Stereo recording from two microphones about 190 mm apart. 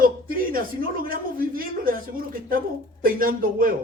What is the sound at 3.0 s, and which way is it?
Speech, 50° right (ahead or behind).